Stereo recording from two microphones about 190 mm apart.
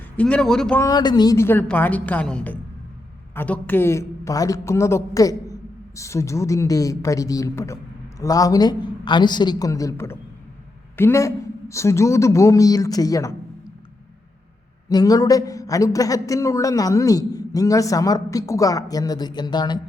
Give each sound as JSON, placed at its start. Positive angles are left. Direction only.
{"t": 0.2, "sound": "speech", "side_deg": 5}
{"t": 0.9, "sound": "a man's voice", "side_deg": 20}
{"t": 14.8, "sound": "speech", "side_deg": 20}